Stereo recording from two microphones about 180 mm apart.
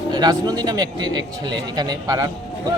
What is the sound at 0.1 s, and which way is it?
Speech, 20° right (ahead or behind).